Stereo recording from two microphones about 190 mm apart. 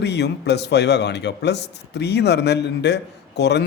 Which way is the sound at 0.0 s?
60° left (ahead or behind).